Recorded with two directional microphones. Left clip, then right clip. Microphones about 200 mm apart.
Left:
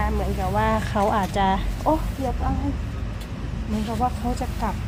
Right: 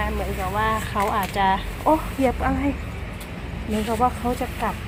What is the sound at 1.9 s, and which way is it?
Speech, 5° right (ahead or behind).